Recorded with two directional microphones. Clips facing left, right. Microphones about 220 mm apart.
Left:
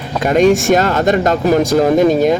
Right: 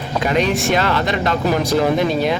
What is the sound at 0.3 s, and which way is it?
Speech, 45° left (ahead or behind).